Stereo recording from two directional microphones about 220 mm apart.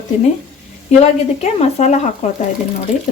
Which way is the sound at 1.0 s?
30° left (ahead or behind).